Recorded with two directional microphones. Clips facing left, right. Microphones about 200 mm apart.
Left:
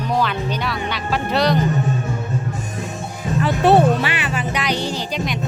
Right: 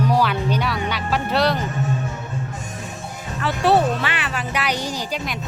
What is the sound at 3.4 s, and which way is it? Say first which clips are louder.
Speech: left 3 dB; 20° left (ahead or behind).